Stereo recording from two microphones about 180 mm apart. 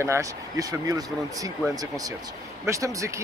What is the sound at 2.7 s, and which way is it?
Speech, 15° right (ahead or behind).